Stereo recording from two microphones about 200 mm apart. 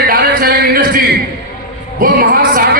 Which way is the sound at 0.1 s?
50° right (ahead or behind).